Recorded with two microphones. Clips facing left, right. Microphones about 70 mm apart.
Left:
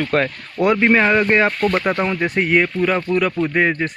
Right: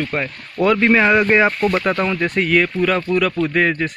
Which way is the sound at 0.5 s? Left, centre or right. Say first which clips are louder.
Even; centre.